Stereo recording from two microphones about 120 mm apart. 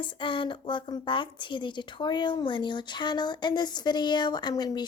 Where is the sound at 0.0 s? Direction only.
40° left (ahead or behind).